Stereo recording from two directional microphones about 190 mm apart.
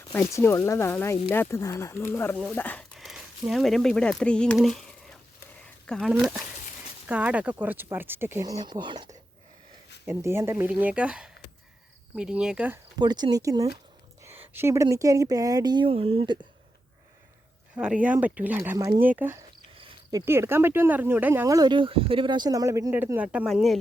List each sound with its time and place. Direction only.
0.1 s speech: 10° left (ahead or behind)
5.6 s a sound: 5° left (ahead or behind)
7.1 s speech: 5° right (ahead or behind); by 9.0 s 25° right (ahead or behind)
10.1 s speech: 15° right (ahead or behind)
13.0 s speech: 20° right (ahead or behind)
17.7 s speech: 5° right (ahead or behind)
19.7 s speech: 25° right (ahead or behind); by 23.7 s centre (ahead or behind)